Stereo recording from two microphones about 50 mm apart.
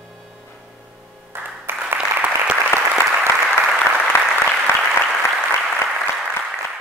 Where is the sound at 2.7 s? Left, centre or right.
Left.